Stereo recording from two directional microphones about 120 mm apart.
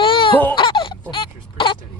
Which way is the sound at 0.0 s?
45° left (ahead or behind).